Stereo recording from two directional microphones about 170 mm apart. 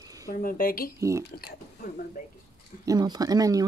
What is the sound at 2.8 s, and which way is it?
Speech, 20° right (ahead or behind).